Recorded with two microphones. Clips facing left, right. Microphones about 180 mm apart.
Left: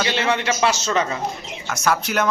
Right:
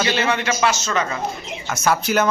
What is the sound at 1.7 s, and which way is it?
Speech, centre (ahead or behind).